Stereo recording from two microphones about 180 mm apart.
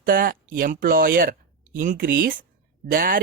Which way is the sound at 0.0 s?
55° right (ahead or behind).